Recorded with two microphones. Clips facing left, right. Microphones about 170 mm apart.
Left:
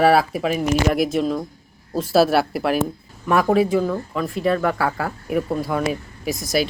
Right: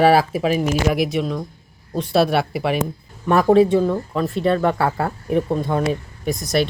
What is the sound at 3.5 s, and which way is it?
Speech, 30° right (ahead or behind).